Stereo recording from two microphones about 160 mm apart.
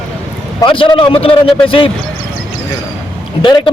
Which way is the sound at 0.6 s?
30° left (ahead or behind).